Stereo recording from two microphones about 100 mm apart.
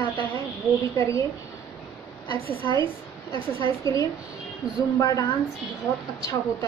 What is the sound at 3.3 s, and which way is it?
Speech, 60° right (ahead or behind).